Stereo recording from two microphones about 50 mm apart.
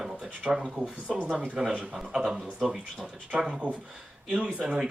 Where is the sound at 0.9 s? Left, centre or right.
Right.